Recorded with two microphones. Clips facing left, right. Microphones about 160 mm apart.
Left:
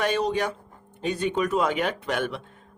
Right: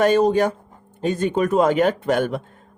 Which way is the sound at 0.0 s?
45° right (ahead or behind).